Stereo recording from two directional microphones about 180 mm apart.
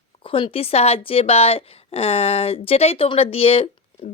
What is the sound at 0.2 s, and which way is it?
A woman's voice, 30° left (ahead or behind).